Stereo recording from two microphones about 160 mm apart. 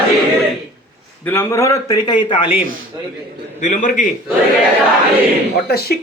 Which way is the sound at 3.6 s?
50° left (ahead or behind).